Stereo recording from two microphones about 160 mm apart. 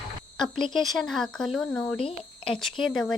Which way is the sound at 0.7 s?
Centre (ahead or behind).